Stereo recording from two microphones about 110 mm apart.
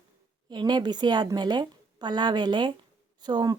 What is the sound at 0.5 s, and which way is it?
A woman's voice, 40° right (ahead or behind).